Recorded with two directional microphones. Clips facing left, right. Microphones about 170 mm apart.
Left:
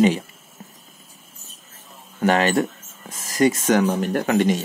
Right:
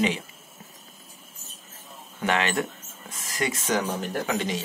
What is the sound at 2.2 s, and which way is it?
Speech, 40° left (ahead or behind).